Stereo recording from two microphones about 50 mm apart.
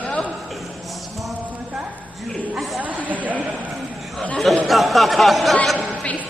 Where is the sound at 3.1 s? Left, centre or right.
Right.